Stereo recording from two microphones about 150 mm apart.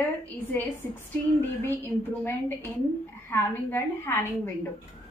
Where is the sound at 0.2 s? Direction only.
10° left (ahead or behind).